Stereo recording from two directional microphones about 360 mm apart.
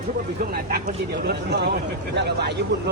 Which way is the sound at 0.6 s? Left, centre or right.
Right.